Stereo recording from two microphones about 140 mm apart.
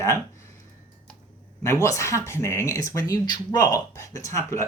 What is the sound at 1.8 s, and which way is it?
Speech, 20° left (ahead or behind).